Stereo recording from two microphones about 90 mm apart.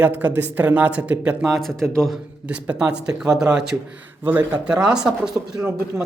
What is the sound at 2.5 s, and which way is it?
Speech, 15° right (ahead or behind).